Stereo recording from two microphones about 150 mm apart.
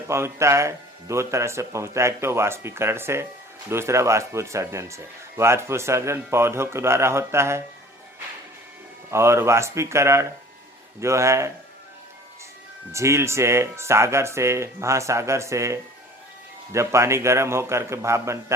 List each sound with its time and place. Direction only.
0.1 s speech: 20° right (ahead or behind)
9.0 s speech: 20° right (ahead or behind)
12.9 s speech: 20° right (ahead or behind)